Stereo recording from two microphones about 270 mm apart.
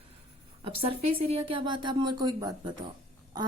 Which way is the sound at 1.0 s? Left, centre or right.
Right.